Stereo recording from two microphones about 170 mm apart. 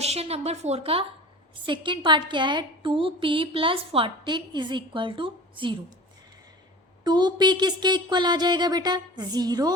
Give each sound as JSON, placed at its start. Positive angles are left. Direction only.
{"t": 0.0, "sound": "a woman's voice", "side_deg": -35}
{"t": 7.0, "sound": "a woman's voice", "side_deg": -25}